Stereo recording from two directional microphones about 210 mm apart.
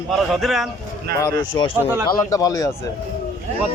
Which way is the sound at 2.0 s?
15° left (ahead or behind).